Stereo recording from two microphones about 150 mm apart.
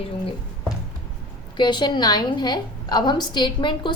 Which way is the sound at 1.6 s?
30° left (ahead or behind).